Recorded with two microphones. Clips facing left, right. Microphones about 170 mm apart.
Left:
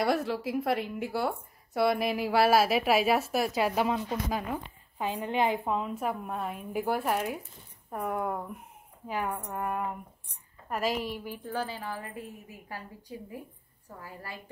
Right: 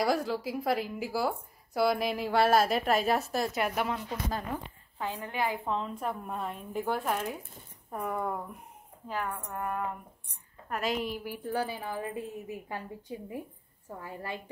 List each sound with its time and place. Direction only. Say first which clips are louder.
0.0 s a woman's voice: left 1 dB; centre (ahead or behind); by 5.7 s 20° left (ahead or behind)
5.7 s a woman's voice: left 2 dB; 10° left (ahead or behind)
11.2 s a woman's voice: right 2 dB; 15° right (ahead or behind)
14.0 s a woman's voice: right 4 dB; 25° right (ahead or behind)